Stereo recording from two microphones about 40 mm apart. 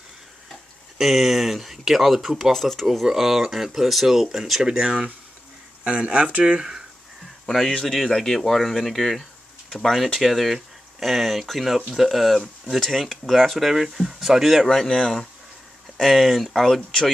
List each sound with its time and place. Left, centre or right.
0.9 s speech: centre
4.6 s speech: right
7.4 s speech: centre
14.7 s speech: centre